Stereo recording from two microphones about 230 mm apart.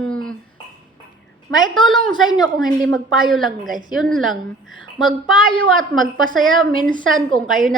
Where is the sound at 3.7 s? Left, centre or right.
Right.